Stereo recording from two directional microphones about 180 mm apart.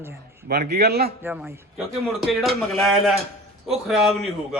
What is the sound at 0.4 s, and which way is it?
Speech, 60° right (ahead or behind).